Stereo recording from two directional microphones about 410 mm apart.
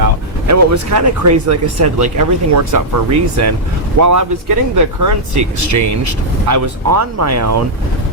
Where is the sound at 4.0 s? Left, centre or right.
Right.